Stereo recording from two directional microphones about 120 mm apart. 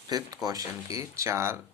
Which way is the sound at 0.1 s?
35° right (ahead or behind).